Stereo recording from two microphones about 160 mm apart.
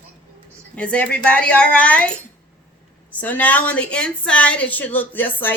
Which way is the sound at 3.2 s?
10° left (ahead or behind).